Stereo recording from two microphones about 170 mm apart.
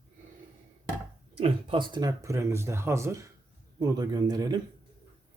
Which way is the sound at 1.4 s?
30° right (ahead or behind).